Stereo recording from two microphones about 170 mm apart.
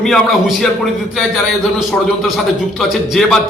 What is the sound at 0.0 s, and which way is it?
A man's voice, centre (ahead or behind).